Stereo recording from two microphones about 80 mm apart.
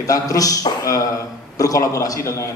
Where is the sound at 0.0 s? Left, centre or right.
Left.